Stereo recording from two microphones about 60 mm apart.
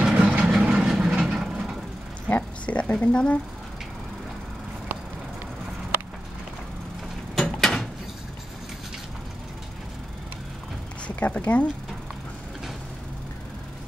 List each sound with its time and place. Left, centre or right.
0.0 s vehicle: centre
0.5 s vehicle: centre
2.2 s speech: left
7.4 s a sound: centre
11.1 s speech: left